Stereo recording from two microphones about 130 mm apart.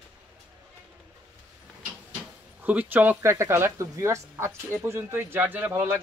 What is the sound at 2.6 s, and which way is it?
Speech, 15° right (ahead or behind).